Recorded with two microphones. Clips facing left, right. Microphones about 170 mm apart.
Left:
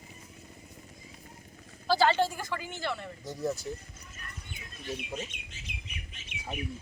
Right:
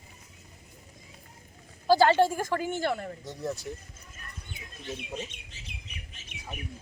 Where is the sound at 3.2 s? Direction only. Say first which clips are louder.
Left 2 dB; centre (ahead or behind).